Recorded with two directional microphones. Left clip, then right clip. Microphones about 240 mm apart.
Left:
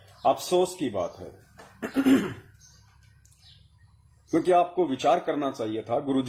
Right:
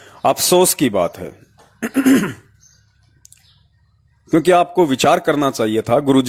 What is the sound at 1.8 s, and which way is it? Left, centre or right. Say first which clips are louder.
Throat clearing: right 9 dB; right.